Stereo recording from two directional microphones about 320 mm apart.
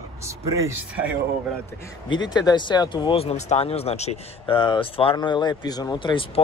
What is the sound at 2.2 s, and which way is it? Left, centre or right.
Speech, centre.